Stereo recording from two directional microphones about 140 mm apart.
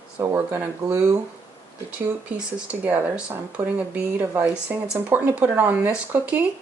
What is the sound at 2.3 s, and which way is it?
Speech, 10° right (ahead or behind).